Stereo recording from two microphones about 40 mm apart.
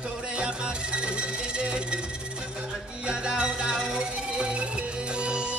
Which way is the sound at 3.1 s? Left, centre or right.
Right.